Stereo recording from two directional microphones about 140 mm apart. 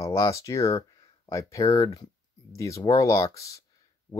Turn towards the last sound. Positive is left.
turn(degrees=25)  # may be behind; listen again after turning